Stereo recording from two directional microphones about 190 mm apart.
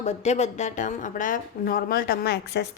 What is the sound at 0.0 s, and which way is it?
A woman's voice, 35° left (ahead or behind).